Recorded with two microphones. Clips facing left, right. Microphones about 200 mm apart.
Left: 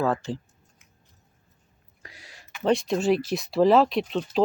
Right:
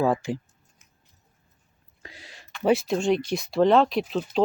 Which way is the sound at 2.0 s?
25° right (ahead or behind).